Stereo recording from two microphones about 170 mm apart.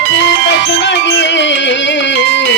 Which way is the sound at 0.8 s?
90° left.